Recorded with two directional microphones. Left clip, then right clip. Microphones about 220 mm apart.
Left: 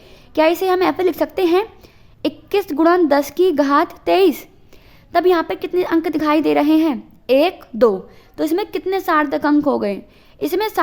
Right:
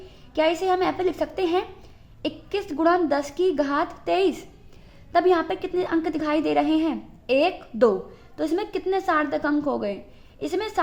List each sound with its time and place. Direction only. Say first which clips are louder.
0.0 s a woman's voice: left 7 dB; 45° left (ahead or behind)